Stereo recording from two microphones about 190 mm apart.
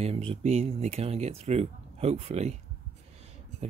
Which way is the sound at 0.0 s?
30° right (ahead or behind).